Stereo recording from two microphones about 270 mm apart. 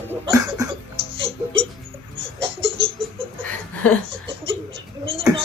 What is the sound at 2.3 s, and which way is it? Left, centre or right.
Baby laughter, centre.